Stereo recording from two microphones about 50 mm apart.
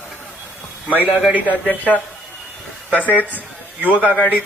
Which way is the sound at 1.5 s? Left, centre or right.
Left.